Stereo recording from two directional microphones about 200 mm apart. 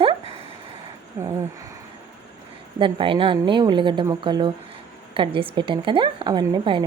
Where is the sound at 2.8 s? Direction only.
25° right (ahead or behind).